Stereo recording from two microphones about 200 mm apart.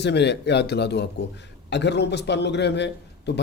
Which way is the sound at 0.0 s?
60° left (ahead or behind).